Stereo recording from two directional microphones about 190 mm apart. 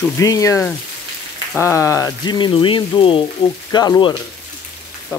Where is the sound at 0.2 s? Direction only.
15° left (ahead or behind).